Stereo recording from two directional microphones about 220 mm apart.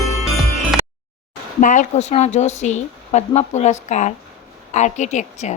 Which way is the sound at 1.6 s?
35° left (ahead or behind).